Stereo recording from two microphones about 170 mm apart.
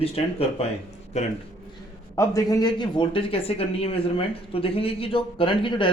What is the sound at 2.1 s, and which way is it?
Speech, 20° left (ahead or behind).